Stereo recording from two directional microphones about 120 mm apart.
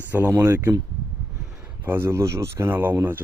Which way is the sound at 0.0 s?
15° right (ahead or behind).